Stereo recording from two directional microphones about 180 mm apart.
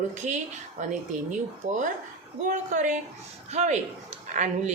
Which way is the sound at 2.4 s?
45° right (ahead or behind).